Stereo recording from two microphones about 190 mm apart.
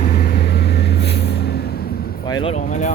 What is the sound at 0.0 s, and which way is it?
Vehicle, 55° left (ahead or behind).